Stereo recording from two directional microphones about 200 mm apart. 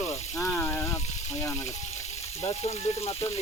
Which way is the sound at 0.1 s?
10° left (ahead or behind).